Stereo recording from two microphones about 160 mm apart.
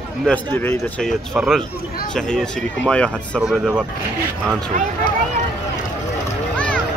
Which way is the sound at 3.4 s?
5° right (ahead or behind).